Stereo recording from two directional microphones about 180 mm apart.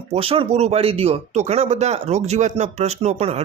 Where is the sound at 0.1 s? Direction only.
30° right (ahead or behind).